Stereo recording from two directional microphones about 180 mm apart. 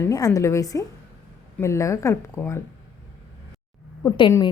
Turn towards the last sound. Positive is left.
turn(degrees=25)  # may be behind; listen again after turning